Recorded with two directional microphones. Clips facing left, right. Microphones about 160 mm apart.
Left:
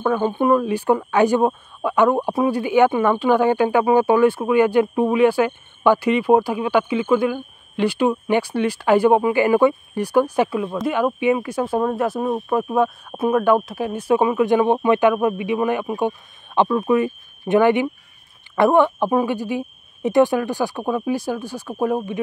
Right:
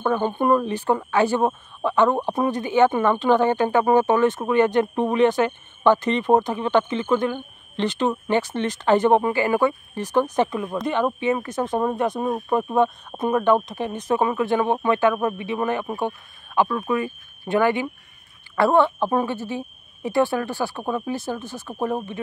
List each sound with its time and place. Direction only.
0.0 s speech: 5° left (ahead or behind)